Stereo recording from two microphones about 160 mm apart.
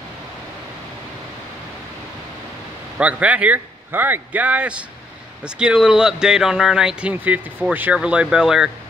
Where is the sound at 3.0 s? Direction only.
10° right (ahead or behind).